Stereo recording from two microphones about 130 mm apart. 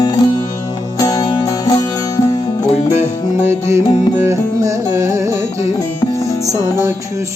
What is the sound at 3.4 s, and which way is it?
Music, 20° right (ahead or behind).